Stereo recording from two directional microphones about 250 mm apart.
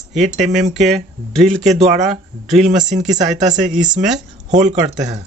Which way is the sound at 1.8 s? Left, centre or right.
Right.